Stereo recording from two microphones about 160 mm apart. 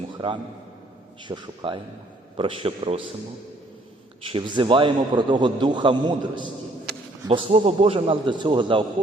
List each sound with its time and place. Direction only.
0.2 s a man's voice: 30° right (ahead or behind)
4.3 s a man's voice: 30° right (ahead or behind)